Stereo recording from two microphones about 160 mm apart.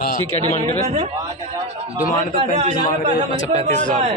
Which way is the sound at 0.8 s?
40° right (ahead or behind).